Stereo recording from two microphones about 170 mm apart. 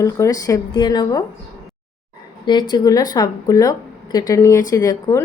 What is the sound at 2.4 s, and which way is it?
Speech, 25° left (ahead or behind).